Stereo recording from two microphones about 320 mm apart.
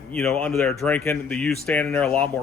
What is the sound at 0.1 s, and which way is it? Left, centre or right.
Speech, centre.